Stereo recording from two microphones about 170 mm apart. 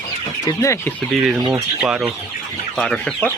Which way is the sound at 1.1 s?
Centre (ahead or behind).